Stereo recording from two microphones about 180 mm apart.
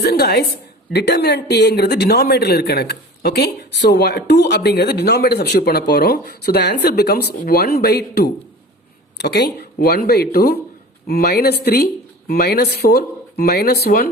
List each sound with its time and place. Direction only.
0.0 s speech: 65° left (ahead or behind)